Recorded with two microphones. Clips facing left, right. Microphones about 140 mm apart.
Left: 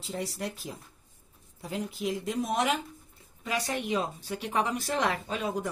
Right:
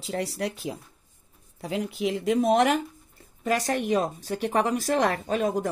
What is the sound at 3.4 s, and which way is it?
Speech, 45° right (ahead or behind).